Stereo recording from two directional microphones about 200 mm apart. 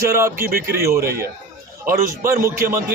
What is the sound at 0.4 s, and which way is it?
Speech, 50° right (ahead or behind).